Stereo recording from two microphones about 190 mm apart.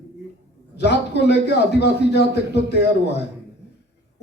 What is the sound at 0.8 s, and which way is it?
A man's voice, 65° left (ahead or behind).